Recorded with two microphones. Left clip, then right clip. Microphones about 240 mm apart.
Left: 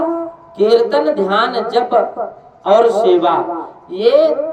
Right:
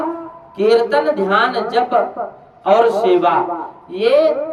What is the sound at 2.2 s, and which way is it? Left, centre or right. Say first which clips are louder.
Speech: left 2 dB; right.